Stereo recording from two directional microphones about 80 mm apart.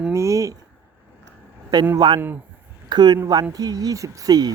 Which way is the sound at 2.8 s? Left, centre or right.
Right.